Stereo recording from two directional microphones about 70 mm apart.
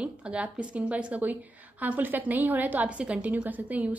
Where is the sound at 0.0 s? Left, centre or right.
Centre.